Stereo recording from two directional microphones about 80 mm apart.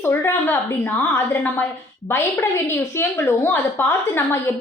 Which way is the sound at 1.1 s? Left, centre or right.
Left.